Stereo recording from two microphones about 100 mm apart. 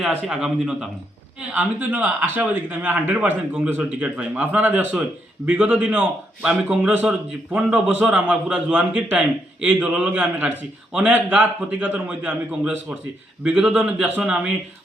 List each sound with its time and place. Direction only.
0.1 s a man's voice: 10° right (ahead or behind)
1.5 s a man's voice: 20° right (ahead or behind)